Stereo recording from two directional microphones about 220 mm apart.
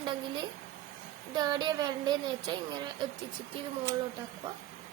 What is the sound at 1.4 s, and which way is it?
Speech, 20° right (ahead or behind).